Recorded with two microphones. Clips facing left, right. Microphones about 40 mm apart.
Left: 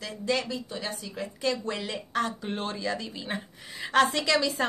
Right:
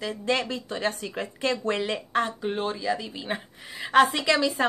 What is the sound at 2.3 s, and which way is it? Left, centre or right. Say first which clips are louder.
Speech: right 4 dB; centre.